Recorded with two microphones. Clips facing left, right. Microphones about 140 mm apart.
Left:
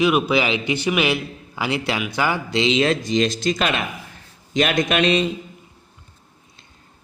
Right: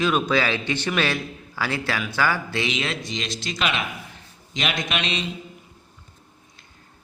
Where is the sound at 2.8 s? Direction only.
40° left (ahead or behind).